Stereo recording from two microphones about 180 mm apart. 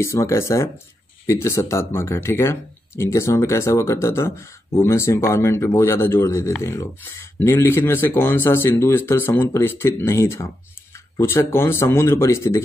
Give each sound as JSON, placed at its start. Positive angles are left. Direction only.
{"t": 0.0, "sound": "speech", "side_deg": 15}